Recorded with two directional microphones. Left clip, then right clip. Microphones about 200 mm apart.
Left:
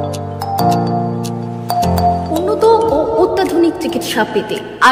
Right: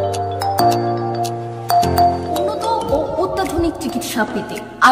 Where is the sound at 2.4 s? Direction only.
15° left (ahead or behind).